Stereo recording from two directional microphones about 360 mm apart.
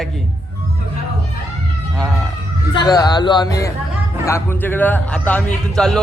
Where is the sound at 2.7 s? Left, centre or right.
Centre.